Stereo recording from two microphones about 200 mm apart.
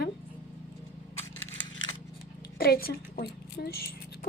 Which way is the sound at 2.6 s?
50° left (ahead or behind).